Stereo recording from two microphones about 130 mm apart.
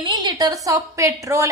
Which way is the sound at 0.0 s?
30° right (ahead or behind).